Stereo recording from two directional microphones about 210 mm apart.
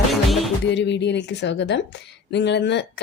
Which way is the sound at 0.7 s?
55° left (ahead or behind).